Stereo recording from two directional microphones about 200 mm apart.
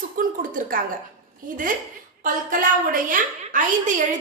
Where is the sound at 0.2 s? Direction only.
45° right (ahead or behind).